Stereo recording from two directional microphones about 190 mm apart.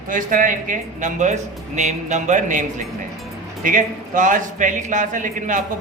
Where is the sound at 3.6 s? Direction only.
45° right (ahead or behind).